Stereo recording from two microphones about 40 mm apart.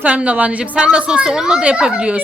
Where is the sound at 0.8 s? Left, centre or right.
Right.